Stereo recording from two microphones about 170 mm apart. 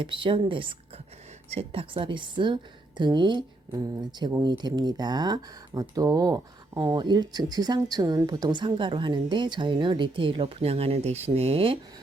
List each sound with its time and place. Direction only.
0.0 s speech: 30° right (ahead or behind)